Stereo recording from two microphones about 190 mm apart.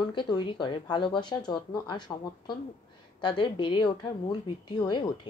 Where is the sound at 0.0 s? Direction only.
25° left (ahead or behind).